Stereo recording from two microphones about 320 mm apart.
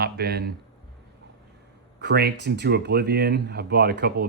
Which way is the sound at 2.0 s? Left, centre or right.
Right.